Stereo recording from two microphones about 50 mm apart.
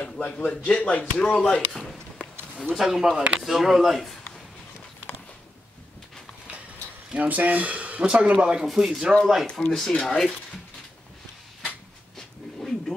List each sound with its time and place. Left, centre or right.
0.0 s speech: left
2.8 s speech: centre
7.2 s speech: right
8.6 s speech: centre
9.7 s speech: centre
12.2 s dog: centre